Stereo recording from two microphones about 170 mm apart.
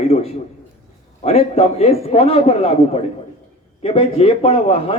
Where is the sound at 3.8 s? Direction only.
35° left (ahead or behind).